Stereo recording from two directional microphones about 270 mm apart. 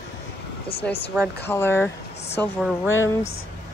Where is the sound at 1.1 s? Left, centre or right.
Centre.